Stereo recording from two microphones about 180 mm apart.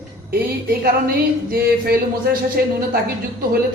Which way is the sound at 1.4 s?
55° right (ahead or behind).